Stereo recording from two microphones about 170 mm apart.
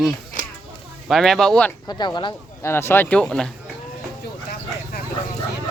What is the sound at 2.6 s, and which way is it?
Speech, 15° left (ahead or behind).